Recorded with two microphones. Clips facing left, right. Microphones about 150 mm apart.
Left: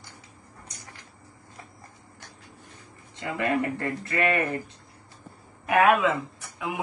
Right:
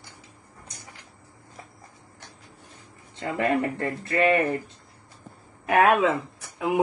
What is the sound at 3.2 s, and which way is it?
Speech, 30° right (ahead or behind).